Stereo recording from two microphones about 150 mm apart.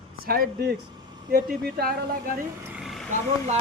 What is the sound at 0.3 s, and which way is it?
Speech, 90° right.